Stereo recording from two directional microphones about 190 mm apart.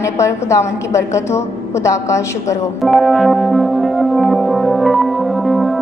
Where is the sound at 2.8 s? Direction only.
Centre (ahead or behind).